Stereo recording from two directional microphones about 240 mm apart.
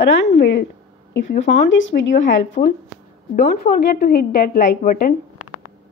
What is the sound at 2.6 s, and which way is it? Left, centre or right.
A woman's voice, left.